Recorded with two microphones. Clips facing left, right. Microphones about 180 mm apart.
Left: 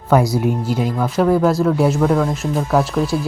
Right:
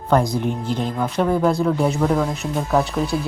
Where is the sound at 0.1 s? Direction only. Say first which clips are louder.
Left 3 dB; 5° left (ahead or behind).